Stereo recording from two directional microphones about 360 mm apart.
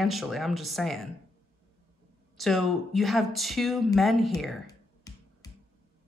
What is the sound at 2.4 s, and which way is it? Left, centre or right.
Speech, centre.